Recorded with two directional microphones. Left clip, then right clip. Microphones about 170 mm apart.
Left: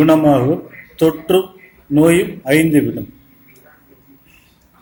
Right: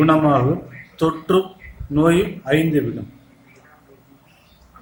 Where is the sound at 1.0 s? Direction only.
15° left (ahead or behind).